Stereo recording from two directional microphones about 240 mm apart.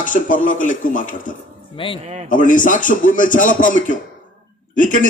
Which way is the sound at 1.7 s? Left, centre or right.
Left.